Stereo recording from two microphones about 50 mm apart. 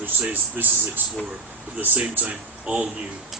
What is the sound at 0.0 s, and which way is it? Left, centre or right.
Speech, right.